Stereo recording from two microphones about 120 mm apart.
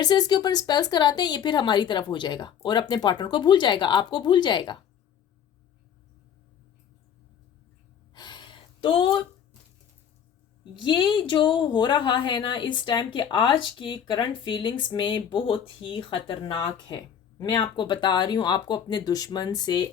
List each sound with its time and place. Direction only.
0.0 s speech: 35° left (ahead or behind)
8.1 s a sound: 35° left (ahead or behind)
10.8 s speech: 40° left (ahead or behind)